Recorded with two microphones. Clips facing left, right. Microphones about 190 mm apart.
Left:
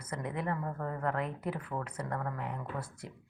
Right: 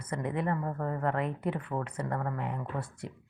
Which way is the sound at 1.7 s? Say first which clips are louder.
Right 4 dB; 20° right (ahead or behind).